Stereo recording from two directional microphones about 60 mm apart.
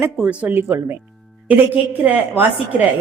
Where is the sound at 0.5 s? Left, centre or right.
Right.